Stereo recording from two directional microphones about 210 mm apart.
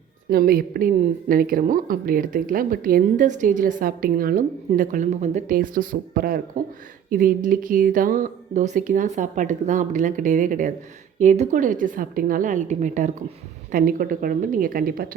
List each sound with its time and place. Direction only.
0.3 s a woman's voice: 45° right (ahead or behind)